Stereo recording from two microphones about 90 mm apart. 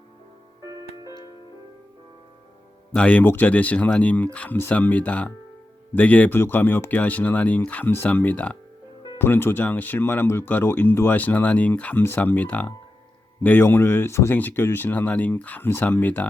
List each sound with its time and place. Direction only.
0.6 s music: 40° right (ahead or behind)
2.9 s speech: 15° left (ahead or behind)